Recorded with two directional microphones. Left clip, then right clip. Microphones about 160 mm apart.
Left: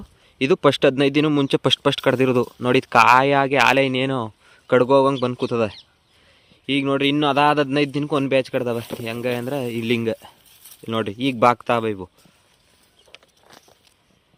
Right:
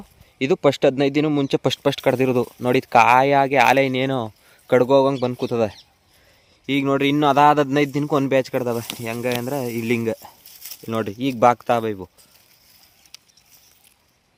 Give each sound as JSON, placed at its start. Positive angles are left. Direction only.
{"t": 0.3, "sound": "speech", "side_deg": 5}
{"t": 6.7, "sound": "a man's voice", "side_deg": -20}